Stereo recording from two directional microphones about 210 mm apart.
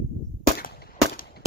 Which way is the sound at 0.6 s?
45° left (ahead or behind).